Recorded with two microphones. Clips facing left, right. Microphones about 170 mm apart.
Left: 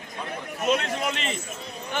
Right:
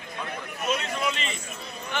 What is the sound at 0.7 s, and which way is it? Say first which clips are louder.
Speech: left 2 dB; 65° left (ahead or behind).